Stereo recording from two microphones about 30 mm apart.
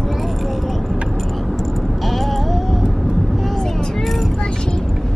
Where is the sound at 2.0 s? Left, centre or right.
Centre.